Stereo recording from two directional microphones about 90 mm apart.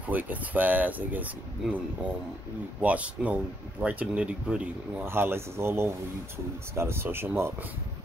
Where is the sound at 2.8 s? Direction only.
15° right (ahead or behind).